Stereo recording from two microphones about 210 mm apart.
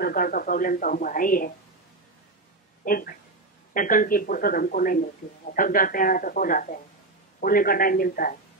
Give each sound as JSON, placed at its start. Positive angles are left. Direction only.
{"t": 0.0, "sound": "speech", "side_deg": 45}
{"t": 2.8, "sound": "speech", "side_deg": 45}